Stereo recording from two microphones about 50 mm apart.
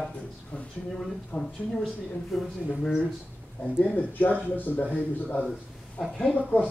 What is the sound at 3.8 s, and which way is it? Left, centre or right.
Speech, left.